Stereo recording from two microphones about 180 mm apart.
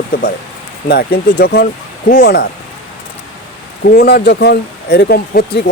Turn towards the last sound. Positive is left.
turn(degrees=65)  # may be behind; listen again after turning